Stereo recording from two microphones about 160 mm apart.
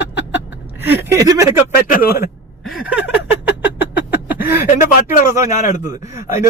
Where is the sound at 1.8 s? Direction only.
55° left (ahead or behind).